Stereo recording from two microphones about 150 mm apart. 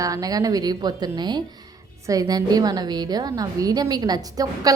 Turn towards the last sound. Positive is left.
turn(degrees=-25)  # may be behind; listen again after turning